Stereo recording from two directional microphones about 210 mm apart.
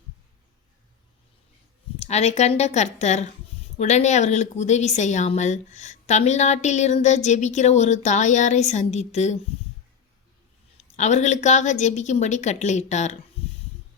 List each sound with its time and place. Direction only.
2.0 s a woman's voice: 30° left (ahead or behind)
10.9 s a woman's voice: 35° left (ahead or behind)